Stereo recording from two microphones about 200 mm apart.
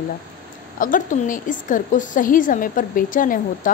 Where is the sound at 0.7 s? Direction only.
40° left (ahead or behind).